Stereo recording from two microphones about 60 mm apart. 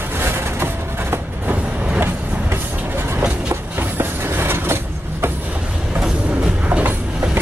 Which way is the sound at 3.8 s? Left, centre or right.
Right.